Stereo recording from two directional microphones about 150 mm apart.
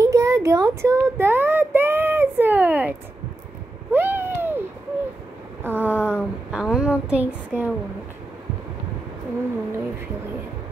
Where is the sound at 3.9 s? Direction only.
15° right (ahead or behind).